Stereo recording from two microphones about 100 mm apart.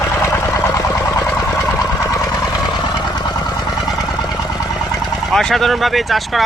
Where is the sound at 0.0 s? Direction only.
30° left (ahead or behind).